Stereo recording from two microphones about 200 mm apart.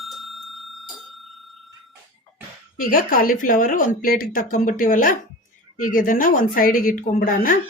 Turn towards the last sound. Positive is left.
turn(degrees=45)  # may be behind; listen again after turning